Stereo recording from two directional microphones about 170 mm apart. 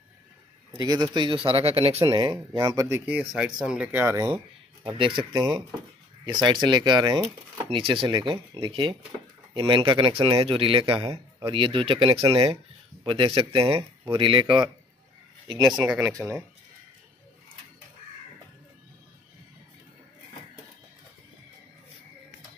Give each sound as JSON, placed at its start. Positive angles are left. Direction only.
{"t": 0.7, "sound": "a man's voice", "side_deg": -25}
{"t": 2.0, "sound": "speech", "side_deg": -25}
{"t": 3.1, "sound": "speech", "side_deg": -5}
{"t": 4.9, "sound": "speech", "side_deg": -30}
{"t": 15.7, "sound": "speech", "side_deg": -5}
{"t": 16.1, "sound": "speech", "side_deg": -20}